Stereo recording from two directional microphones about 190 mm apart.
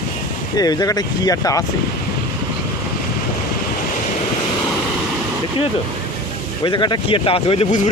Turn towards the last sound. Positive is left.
turn(degrees=30)  # may be behind; listen again after turning